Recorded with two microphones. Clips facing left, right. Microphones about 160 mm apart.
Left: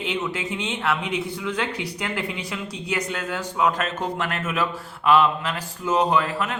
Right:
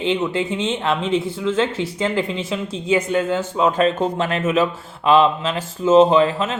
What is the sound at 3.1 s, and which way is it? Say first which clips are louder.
Speech: right 9 dB; 25° right (ahead or behind).